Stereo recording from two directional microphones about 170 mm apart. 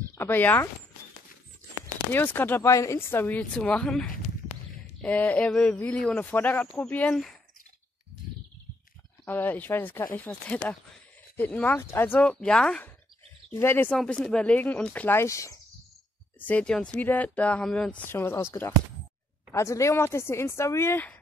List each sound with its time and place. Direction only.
0.1 s speech: 10° left (ahead or behind)
2.1 s speech: 10° left (ahead or behind)
9.2 s speech: 10° left (ahead or behind)